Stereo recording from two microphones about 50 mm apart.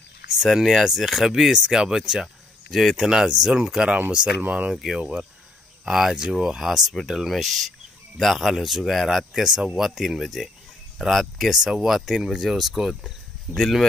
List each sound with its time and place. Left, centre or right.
0.4 s speech: centre
2.7 s speech: centre
3.1 s speech: centre
4.7 s speech: centre